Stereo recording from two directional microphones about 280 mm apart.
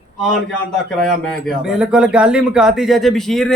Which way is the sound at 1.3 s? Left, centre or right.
Centre.